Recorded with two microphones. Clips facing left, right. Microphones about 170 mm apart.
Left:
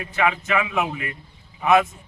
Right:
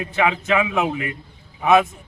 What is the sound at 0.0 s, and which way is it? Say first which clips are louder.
A man's voice: right 2 dB; 20° right (ahead or behind).